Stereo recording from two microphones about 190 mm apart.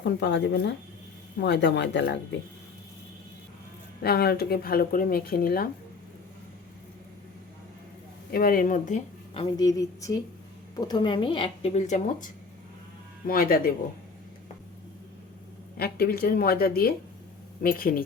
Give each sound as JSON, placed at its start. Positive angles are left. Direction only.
{"t": 0.0, "sound": "speech", "side_deg": 60}
{"t": 4.0, "sound": "speech", "side_deg": 55}
{"t": 8.3, "sound": "speech", "side_deg": 50}
{"t": 9.3, "sound": "speech", "side_deg": 25}
{"t": 15.8, "sound": "speech", "side_deg": 55}